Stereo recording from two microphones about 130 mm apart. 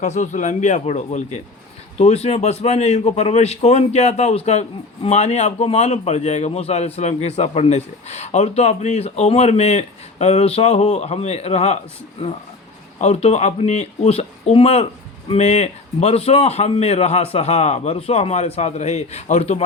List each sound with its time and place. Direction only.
0.0 s a man's voice: 65° left (ahead or behind)
13.0 s a man's voice: 55° left (ahead or behind)